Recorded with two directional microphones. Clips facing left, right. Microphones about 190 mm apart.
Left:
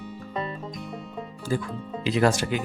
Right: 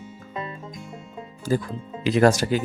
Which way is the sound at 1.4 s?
40° right (ahead or behind).